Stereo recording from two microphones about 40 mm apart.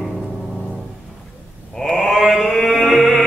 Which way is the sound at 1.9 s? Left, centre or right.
Centre.